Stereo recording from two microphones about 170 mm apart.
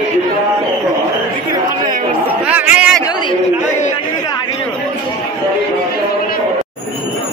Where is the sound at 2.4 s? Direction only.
10° right (ahead or behind).